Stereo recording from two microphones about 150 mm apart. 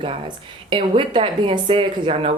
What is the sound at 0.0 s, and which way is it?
A woman's voice, 35° right (ahead or behind).